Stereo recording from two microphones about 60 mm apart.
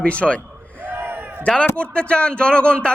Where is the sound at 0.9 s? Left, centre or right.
Right.